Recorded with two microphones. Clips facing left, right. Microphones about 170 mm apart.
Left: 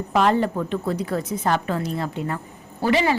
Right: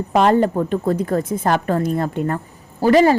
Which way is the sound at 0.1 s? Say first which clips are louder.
Right 5 dB; 45° right (ahead or behind).